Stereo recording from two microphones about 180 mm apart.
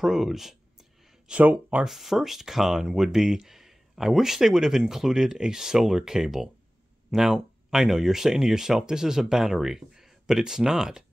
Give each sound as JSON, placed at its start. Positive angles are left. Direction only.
{"t": 0.0, "sound": "speech", "side_deg": 0}